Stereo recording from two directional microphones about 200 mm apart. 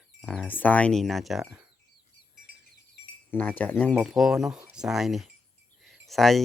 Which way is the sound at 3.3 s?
10° left (ahead or behind).